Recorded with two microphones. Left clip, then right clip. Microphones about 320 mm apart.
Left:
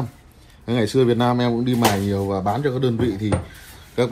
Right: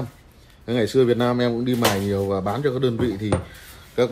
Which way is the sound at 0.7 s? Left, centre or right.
Centre.